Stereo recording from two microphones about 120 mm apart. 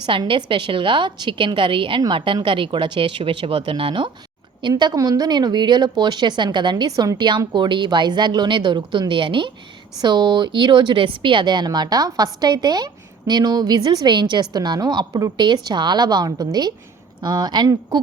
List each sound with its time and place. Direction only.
0.0 s speech: 45° right (ahead or behind)
4.7 s a woman's voice: 30° right (ahead or behind)